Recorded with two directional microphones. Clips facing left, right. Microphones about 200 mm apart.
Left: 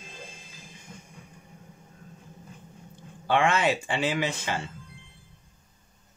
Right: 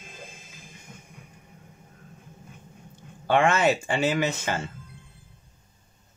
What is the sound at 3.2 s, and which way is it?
Speech, 45° right (ahead or behind).